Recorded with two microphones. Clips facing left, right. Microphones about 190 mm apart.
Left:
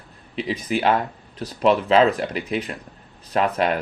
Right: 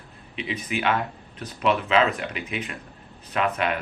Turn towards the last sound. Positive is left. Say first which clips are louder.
# left 4 dB
turn(degrees=35)  # may be behind; listen again after turning